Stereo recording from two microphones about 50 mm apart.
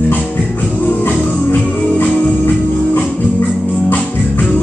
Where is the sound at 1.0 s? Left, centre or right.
Left.